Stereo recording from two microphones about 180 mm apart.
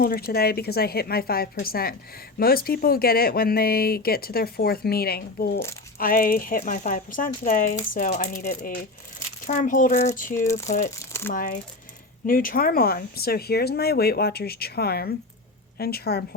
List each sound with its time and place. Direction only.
0.0 s speech: 55° left (ahead or behind)
10.9 s speech: 15° left (ahead or behind)
11.3 s speech: 50° left (ahead or behind)